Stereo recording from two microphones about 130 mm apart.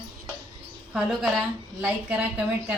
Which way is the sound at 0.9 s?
5° right (ahead or behind).